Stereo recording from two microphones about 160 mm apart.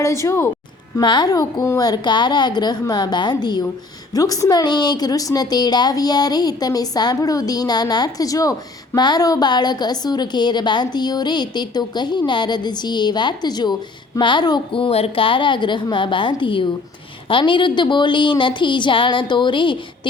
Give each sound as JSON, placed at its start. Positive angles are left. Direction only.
{"t": 0.0, "sound": "a woman's voice", "side_deg": 20}
{"t": 0.9, "sound": "a woman's voice", "side_deg": 25}